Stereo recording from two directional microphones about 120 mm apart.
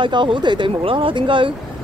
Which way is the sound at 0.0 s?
40° right (ahead or behind).